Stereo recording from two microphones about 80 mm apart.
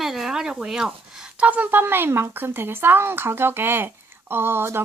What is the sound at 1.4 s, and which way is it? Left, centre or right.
A woman's voice, centre.